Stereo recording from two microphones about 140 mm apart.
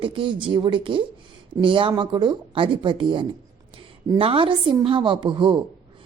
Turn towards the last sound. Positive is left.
turn(degrees=-35)  # may be behind; listen again after turning